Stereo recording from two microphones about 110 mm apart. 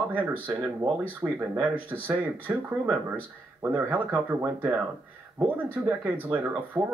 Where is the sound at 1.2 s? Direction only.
20° right (ahead or behind).